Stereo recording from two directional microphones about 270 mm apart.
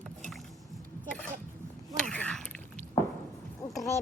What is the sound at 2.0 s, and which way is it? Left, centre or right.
Mechanisms, centre.